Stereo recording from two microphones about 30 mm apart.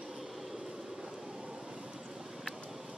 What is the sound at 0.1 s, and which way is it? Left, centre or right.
Vehicle, centre.